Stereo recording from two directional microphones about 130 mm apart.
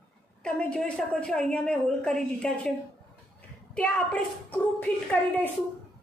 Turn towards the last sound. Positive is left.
turn(degrees=10)  # may be behind; listen again after turning